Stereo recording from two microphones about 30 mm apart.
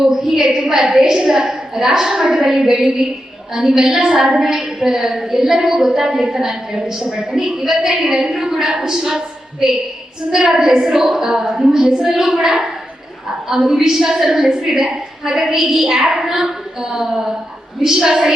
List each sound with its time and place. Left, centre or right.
0.1 s a woman's voice: centre